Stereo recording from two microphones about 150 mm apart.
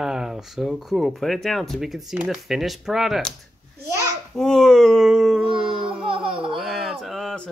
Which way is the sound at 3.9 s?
20° right (ahead or behind).